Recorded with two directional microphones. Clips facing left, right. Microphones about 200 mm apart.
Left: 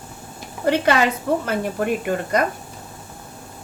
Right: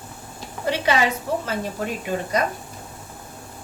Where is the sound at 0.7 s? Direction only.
55° left (ahead or behind).